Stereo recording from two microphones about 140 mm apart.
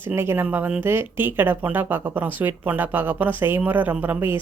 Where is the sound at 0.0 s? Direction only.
15° right (ahead or behind).